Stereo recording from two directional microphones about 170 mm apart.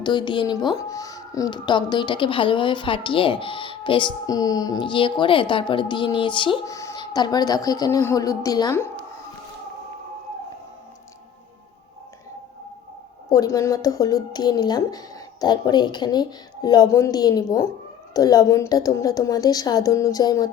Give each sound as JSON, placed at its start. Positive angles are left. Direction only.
{"t": 0.0, "sound": "speech", "side_deg": 25}
{"t": 13.3, "sound": "speech", "side_deg": 20}